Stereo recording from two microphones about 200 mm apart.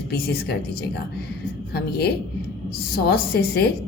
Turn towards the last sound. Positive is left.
turn(degrees=50)  # may be behind; listen again after turning